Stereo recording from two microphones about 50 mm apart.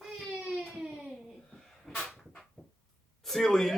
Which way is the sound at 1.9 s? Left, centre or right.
Centre.